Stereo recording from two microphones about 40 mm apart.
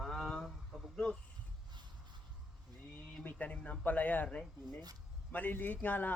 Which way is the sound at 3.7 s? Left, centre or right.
Left.